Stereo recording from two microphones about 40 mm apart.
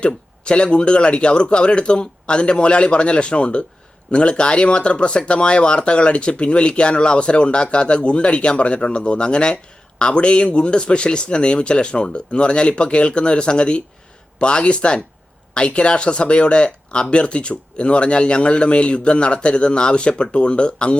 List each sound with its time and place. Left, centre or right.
0.0 s speech: left